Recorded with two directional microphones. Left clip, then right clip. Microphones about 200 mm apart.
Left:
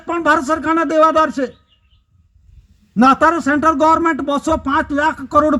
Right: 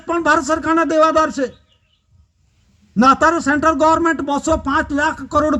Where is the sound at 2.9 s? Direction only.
35° left (ahead or behind).